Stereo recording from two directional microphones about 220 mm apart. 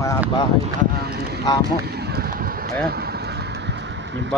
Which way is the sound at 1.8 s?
45° right (ahead or behind).